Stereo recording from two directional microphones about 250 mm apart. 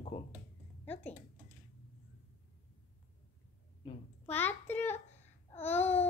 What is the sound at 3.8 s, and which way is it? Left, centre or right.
Speech, left.